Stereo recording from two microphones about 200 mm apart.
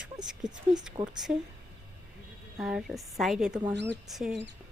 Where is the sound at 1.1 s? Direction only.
5° right (ahead or behind).